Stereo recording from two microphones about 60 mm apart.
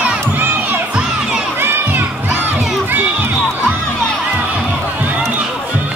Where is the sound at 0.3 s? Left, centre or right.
Right.